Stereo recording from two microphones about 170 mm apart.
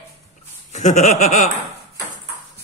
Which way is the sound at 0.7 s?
45° left (ahead or behind).